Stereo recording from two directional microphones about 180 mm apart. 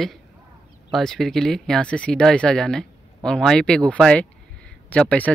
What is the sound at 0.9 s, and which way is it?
Speech, centre (ahead or behind).